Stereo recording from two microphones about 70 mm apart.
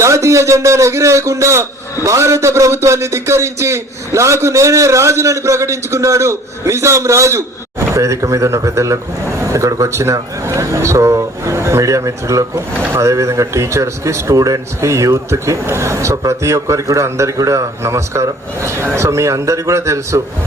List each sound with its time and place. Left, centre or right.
0.0 s a man's voice: right